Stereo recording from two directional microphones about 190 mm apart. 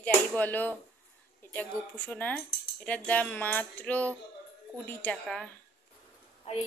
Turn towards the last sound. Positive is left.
turn(degrees=35)  # may be behind; listen again after turning